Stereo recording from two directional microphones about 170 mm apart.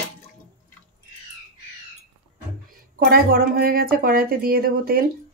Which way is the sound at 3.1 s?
60° right (ahead or behind).